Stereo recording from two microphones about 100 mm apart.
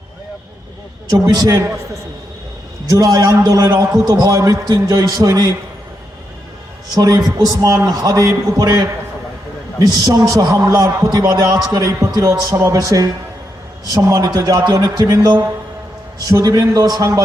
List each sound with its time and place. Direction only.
1.1 s a man's voice: 35° right (ahead or behind)
6.8 s a man's voice: 40° right (ahead or behind)